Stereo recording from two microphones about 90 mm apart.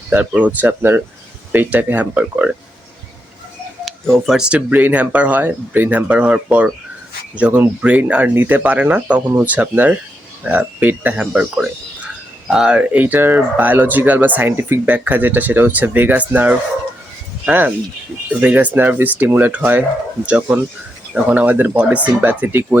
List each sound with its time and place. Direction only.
0.1 s speech: 15° right (ahead or behind)
3.8 s speech: 5° left (ahead or behind)
4.4 s speech: 10° right (ahead or behind)